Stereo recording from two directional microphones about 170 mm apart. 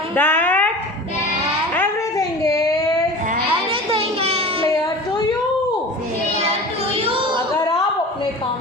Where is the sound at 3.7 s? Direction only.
35° right (ahead or behind).